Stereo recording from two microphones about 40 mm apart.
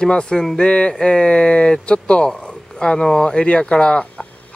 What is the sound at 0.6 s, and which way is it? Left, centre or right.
Speech, left.